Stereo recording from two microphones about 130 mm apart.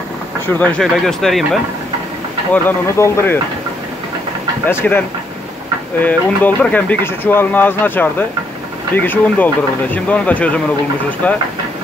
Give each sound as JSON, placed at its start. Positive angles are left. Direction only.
{"t": 0.5, "sound": "speech", "side_deg": 10}
{"t": 2.5, "sound": "speech", "side_deg": 15}
{"t": 4.6, "sound": "speech", "side_deg": 15}